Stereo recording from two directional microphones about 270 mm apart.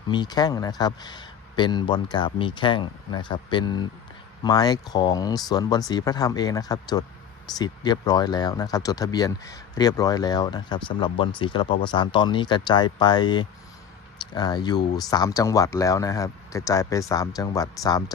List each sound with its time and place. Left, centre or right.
0.1 s speech: centre